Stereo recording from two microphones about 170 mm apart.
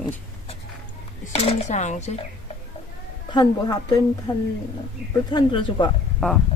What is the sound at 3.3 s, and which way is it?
Speech, 25° left (ahead or behind).